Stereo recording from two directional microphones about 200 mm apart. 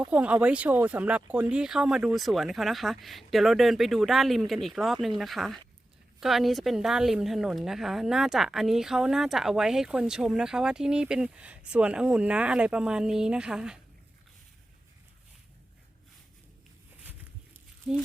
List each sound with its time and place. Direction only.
0.1 s a woman's voice: 5° right (ahead or behind)
17.9 s speech: 5° right (ahead or behind)